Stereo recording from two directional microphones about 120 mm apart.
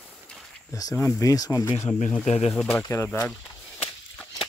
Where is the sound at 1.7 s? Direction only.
80° left.